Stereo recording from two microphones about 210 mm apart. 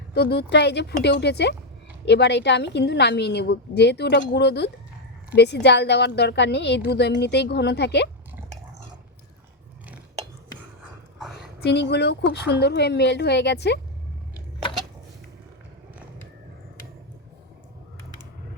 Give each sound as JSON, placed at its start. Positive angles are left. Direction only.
{"t": 0.1, "sound": "a woman's voice", "side_deg": 50}
{"t": 11.6, "sound": "a woman's voice", "side_deg": 55}